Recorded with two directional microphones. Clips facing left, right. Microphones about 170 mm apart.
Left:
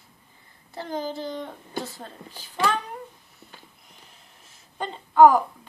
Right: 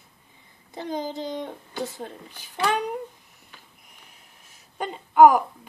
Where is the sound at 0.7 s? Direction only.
15° right (ahead or behind).